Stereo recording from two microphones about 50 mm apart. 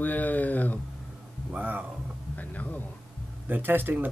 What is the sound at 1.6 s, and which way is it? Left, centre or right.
Speech, right.